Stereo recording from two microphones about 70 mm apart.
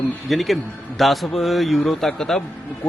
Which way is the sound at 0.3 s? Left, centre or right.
Centre.